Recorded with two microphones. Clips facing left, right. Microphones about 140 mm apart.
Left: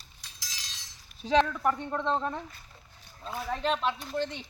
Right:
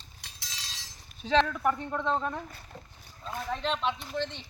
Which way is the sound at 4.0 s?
45° left (ahead or behind).